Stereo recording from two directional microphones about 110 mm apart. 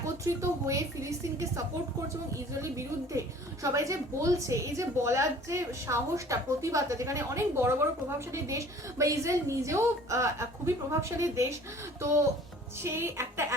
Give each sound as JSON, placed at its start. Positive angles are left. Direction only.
{"t": 0.0, "sound": "speech", "side_deg": -30}
{"t": 2.5, "sound": "a woman's voice", "side_deg": -30}
{"t": 12.8, "sound": "a woman's voice", "side_deg": -25}